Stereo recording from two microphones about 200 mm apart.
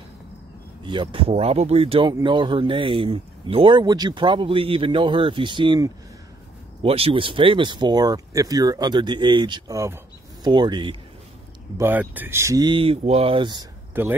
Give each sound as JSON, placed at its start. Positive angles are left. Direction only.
{"t": 0.8, "sound": "speech", "side_deg": -25}
{"t": 11.8, "sound": "speech", "side_deg": -10}